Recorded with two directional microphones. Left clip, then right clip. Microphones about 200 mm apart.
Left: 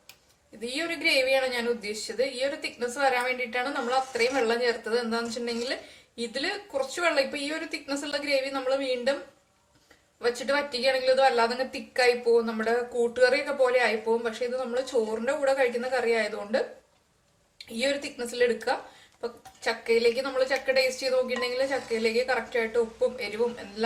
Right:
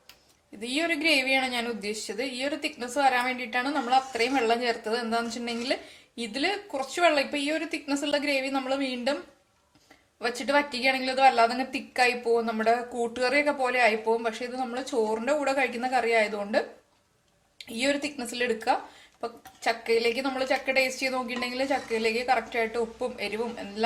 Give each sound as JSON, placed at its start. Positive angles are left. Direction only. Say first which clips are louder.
{"t": 0.6, "sound": "speech", "louder": "right 2 dB", "side_deg": -35}
{"t": 10.2, "sound": "speech", "louder": "right 1 dB", "side_deg": -35}